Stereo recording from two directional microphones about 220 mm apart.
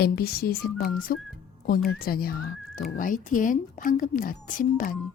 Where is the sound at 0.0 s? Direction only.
45° left (ahead or behind).